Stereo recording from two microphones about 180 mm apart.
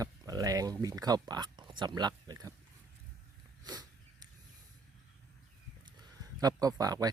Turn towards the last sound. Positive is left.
turn(degrees=-20)  # may be behind; listen again after turning